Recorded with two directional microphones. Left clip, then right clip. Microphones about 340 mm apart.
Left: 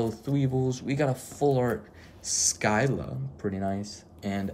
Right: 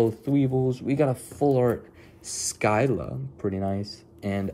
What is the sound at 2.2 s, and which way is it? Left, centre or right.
Speech, centre.